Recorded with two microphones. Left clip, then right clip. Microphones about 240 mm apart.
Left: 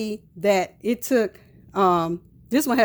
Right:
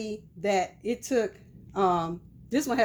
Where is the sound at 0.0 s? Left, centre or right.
Left.